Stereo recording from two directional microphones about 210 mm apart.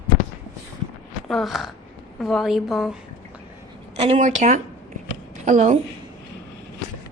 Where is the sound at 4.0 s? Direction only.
35° right (ahead or behind).